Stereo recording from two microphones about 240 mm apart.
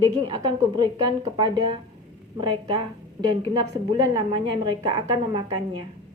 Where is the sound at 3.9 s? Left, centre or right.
Centre.